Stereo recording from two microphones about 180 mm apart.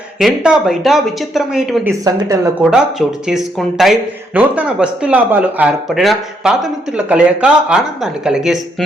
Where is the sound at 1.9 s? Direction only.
20° right (ahead or behind).